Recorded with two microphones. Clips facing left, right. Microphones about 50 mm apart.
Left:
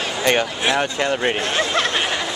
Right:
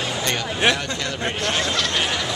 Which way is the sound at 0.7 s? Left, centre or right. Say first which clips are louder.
Left 7 dB; left.